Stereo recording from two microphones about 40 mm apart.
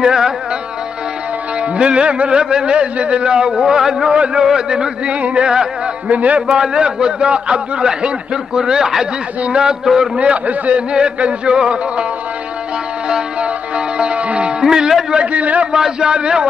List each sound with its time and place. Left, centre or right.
0.0 s a man's voice: centre
1.6 s music: right
4.1 s a man's voice: right
6.0 s a man's voice: right
6.6 s music: centre
8.5 s a man's voice: centre
10.1 s a man's voice: right
10.9 s music: right
13.4 s music: right
14.6 s speech: centre
15.3 s a man's voice: right
15.7 s music: centre